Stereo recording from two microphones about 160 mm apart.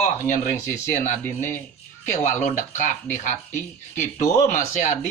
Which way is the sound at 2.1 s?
50° left (ahead or behind).